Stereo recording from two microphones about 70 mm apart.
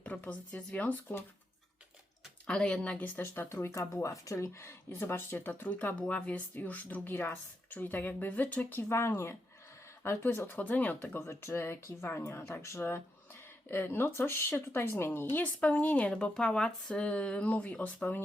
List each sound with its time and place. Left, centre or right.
0.0 s speech: centre
2.5 s speech: centre
3.2 s a woman's voice: left
3.5 s speech: left
8.9 s a woman's voice: left
11.3 s a woman's voice: left
15.6 s speech: left